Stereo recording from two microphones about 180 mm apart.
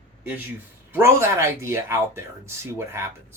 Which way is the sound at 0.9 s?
15° right (ahead or behind).